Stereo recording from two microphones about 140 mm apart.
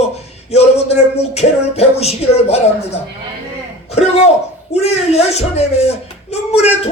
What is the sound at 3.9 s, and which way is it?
Speech, 50° left (ahead or behind).